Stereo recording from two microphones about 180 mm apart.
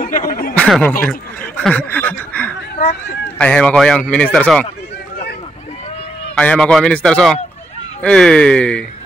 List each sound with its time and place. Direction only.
0.0 s a sound: 50° left (ahead or behind)
0.6 s speech: 5° left (ahead or behind)
6.3 s speech: 5° left (ahead or behind)